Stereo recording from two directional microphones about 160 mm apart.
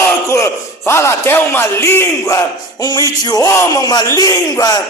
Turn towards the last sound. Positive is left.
turn(degrees=25)  # may be behind; listen again after turning